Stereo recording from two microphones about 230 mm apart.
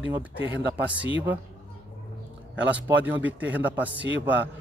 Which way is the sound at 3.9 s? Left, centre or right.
Right.